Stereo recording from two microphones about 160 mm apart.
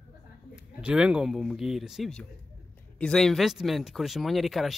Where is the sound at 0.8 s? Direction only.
5° right (ahead or behind).